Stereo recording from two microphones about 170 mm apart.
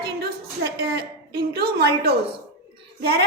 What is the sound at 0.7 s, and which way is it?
A woman's voice, 70° right (ahead or behind).